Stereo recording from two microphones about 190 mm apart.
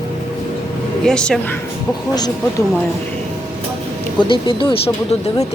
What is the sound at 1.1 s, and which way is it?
Speech, 5° left (ahead or behind).